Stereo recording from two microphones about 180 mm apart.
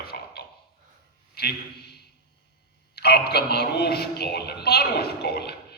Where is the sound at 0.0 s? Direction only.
60° left (ahead or behind).